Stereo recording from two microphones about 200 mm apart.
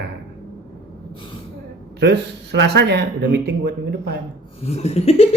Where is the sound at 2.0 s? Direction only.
55° right (ahead or behind).